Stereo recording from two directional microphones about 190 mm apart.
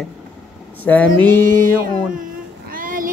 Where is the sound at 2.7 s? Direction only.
45° right (ahead or behind).